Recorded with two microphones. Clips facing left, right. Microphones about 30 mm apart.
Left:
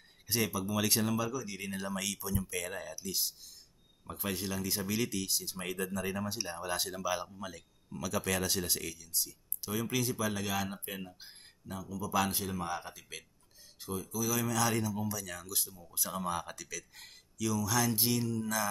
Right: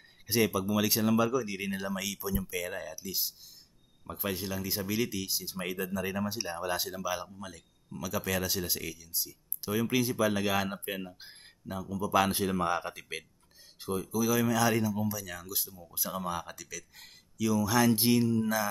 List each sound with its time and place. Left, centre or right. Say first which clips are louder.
0.3 s speech: right 5 dB; centre
1.1 s speech: right 7 dB; centre
17.5 s speech: right 6 dB; centre